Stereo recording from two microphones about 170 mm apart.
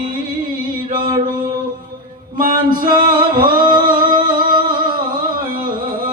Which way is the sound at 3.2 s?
55° right (ahead or behind).